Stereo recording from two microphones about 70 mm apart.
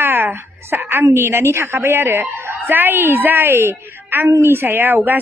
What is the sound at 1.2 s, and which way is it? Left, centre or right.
A man's voice, right.